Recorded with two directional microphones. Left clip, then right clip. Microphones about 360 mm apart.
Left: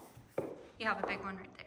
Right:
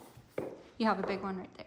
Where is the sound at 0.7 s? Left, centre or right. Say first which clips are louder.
Right 4 dB; centre.